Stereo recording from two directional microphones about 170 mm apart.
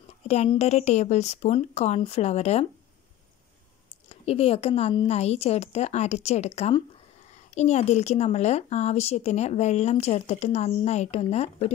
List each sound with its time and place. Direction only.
0.3 s a woman's voice: 40° left (ahead or behind)
4.1 s a woman's voice: 35° left (ahead or behind)